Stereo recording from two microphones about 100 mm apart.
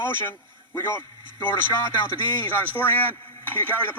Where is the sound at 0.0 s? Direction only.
20° left (ahead or behind).